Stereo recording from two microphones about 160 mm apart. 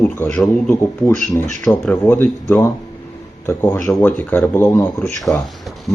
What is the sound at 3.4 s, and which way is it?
Speech, 15° left (ahead or behind).